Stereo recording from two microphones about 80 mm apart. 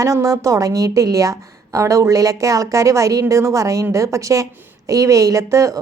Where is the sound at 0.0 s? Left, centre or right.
Right.